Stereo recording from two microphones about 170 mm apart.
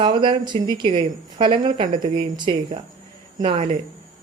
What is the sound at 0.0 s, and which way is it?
Speech, 30° right (ahead or behind).